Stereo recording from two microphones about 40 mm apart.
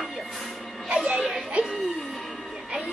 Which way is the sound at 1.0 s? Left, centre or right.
Right.